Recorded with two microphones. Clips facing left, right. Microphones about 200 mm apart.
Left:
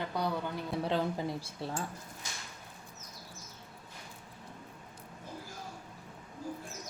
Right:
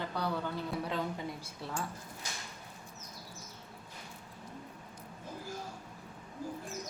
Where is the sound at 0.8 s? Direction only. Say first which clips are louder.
Left 4 dB; 30° left (ahead or behind).